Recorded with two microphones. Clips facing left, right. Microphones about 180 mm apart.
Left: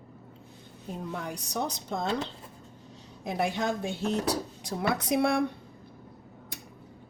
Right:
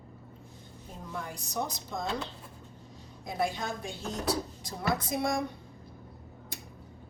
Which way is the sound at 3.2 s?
75° left (ahead or behind).